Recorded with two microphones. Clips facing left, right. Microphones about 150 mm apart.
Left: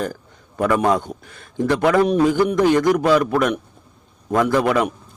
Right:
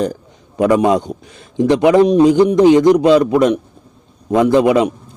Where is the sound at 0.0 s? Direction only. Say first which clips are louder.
Right 7 dB; 20° right (ahead or behind).